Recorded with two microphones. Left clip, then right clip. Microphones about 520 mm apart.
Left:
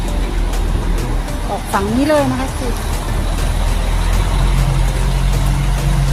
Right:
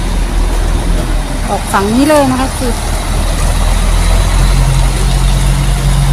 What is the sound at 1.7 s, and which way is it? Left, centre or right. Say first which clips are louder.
Speech: right 5 dB; left.